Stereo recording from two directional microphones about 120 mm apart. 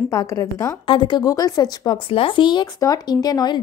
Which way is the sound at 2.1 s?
45° left (ahead or behind).